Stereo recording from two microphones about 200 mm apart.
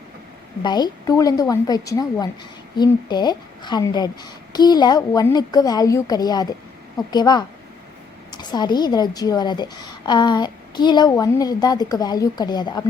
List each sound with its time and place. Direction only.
0.6 s a woman's voice: 20° left (ahead or behind)